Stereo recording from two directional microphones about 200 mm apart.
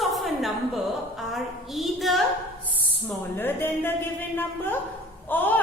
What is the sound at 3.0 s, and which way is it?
A woman's voice, 10° left (ahead or behind).